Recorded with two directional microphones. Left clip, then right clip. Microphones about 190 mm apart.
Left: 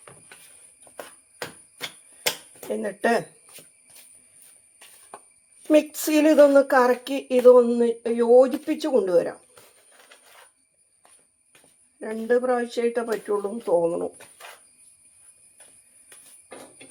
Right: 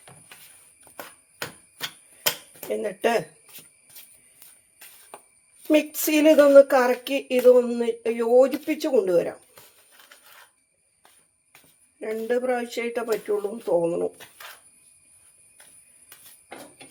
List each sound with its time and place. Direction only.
2.6 s speech: 20° left (ahead or behind)
5.7 s speech: 15° left (ahead or behind)
11.9 s speech: 15° left (ahead or behind)